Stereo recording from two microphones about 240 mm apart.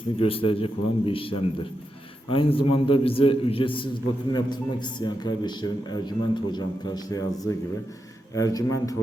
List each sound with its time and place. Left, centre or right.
0.2 s a man's voice: left
8.4 s a man's voice: centre